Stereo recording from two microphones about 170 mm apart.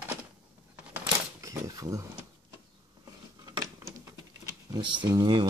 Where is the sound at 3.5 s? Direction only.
20° right (ahead or behind).